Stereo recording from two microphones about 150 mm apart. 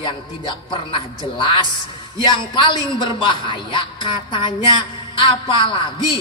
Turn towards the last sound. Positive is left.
turn(degrees=35)  # may be behind; listen again after turning